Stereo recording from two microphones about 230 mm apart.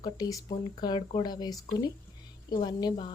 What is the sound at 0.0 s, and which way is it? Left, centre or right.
A woman's voice, centre.